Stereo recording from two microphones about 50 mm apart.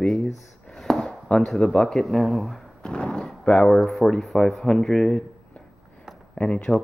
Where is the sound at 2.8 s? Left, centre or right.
Centre.